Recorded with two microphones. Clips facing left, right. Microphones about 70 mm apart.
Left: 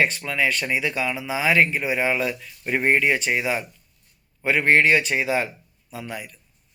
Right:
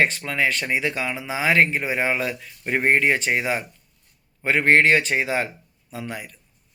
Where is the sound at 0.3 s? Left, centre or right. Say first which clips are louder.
Even; right.